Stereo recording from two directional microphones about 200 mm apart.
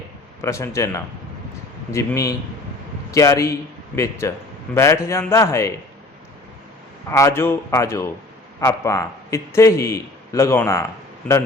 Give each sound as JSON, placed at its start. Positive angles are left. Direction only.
{"t": 0.4, "sound": "a man's voice", "side_deg": 15}
{"t": 7.1, "sound": "a man's voice", "side_deg": 15}